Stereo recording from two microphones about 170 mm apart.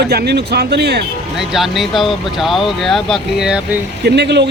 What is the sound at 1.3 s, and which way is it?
Speech, centre (ahead or behind).